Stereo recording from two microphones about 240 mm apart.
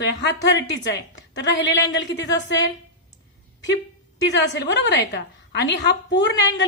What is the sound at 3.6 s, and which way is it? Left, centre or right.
A woman's voice, left.